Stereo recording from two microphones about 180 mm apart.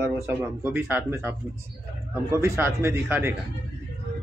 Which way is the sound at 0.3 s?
10° right (ahead or behind).